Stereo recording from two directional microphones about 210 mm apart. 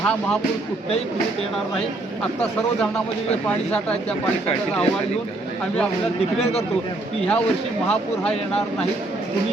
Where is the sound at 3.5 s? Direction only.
5° left (ahead or behind).